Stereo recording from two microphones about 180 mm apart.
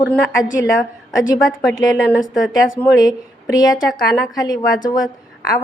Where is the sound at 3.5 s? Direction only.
20° left (ahead or behind).